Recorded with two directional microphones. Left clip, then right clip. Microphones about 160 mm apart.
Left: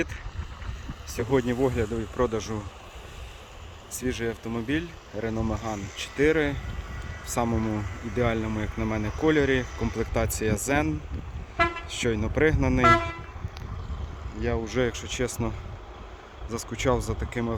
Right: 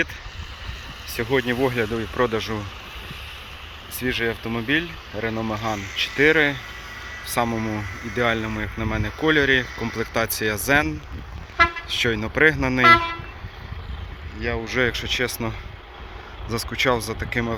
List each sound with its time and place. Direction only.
1.2 s speech: 5° left (ahead or behind)
4.0 s speech: centre (ahead or behind)
5.5 s speech: 45° left (ahead or behind)
6.1 s speech: 10° left (ahead or behind)
14.4 s speech: 20° left (ahead or behind)
14.8 s speech: 10° left (ahead or behind)